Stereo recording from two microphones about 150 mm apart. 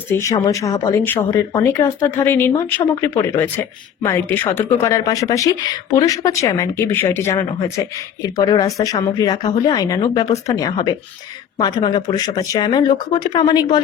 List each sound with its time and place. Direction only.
0.1 s speech: 20° left (ahead or behind)